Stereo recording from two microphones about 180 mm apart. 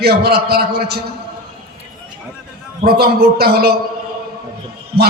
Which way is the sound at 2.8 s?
60° right (ahead or behind).